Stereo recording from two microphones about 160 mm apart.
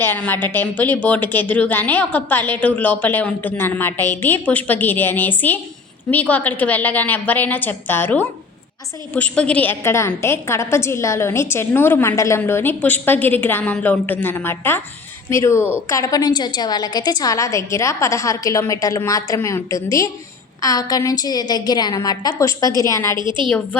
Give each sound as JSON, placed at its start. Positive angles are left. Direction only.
{"t": 0.0, "sound": "a woman's voice", "side_deg": 10}
{"t": 23.1, "sound": "a woman's voice", "side_deg": -30}